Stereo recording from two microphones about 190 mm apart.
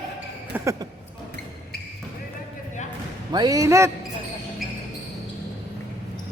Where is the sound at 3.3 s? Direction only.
20° right (ahead or behind).